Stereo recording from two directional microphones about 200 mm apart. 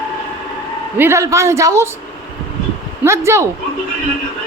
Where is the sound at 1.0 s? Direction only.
15° right (ahead or behind).